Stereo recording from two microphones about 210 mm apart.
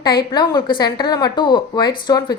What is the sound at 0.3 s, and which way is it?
A woman's voice, 20° left (ahead or behind).